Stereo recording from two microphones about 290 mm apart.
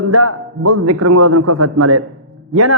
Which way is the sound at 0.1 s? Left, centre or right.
Right.